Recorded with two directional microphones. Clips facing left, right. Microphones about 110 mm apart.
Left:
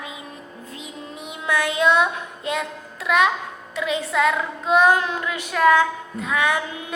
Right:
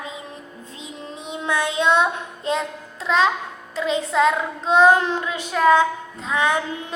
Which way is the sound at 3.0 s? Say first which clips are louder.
Even; 25° right (ahead or behind).